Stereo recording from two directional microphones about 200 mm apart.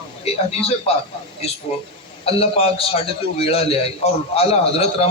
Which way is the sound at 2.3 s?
30° left (ahead or behind).